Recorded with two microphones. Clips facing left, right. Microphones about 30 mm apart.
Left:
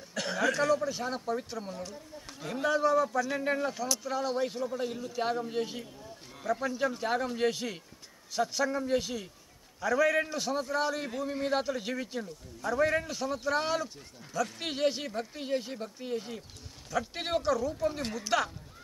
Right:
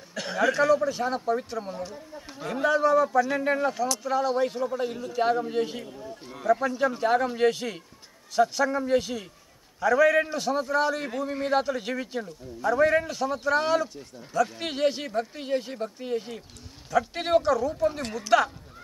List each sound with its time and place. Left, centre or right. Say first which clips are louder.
0.1 s speech: right 4 dB; centre
6.0 s a sound: right 8 dB; centre
6.4 s speech: right 7 dB; centre